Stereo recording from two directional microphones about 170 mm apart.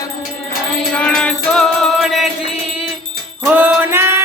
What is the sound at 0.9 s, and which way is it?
Music, 5° left (ahead or behind).